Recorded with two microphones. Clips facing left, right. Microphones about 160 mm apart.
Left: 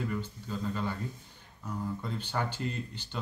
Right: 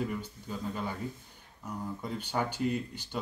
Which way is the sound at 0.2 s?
10° right (ahead or behind).